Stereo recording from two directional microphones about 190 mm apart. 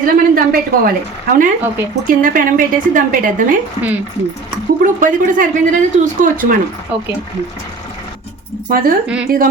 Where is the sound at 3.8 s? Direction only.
30° left (ahead or behind).